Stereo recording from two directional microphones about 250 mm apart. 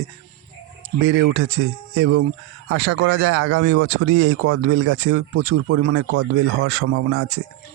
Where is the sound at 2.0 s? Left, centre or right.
Right.